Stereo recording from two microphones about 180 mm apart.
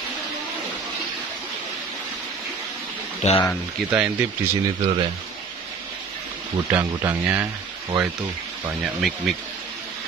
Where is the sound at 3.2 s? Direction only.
40° left (ahead or behind).